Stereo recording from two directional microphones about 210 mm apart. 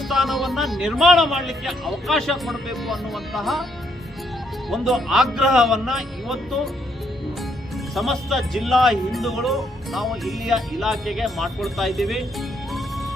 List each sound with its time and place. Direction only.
0.1 s a man's voice: centre (ahead or behind)
4.7 s a man's voice: centre (ahead or behind)
7.9 s a man's voice: centre (ahead or behind)